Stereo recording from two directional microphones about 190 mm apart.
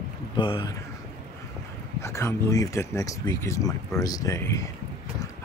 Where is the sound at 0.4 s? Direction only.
25° left (ahead or behind).